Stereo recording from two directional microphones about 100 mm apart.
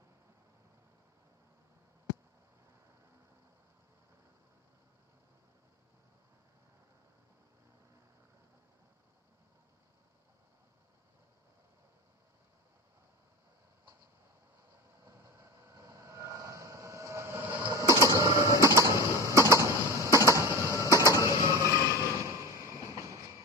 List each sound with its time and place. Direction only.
15.0 s vehicle: 30° right (ahead or behind)
18.0 s printer: 30° right (ahead or behind)
19.3 s a sound: 30° right (ahead or behind)